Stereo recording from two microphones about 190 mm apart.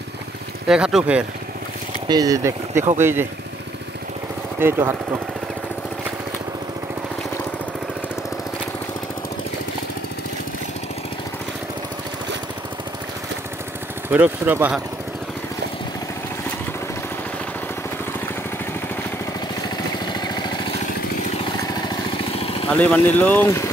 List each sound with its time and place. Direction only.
0.7 s speech: 5° right (ahead or behind)
2.0 s speech: 20° right (ahead or behind)
4.6 s speech: 10° right (ahead or behind)
14.0 s speech: 10° right (ahead or behind)
20.1 s vehicle: 20° left (ahead or behind)
21.6 s vehicle: 25° left (ahead or behind)
22.7 s speech: 10° left (ahead or behind)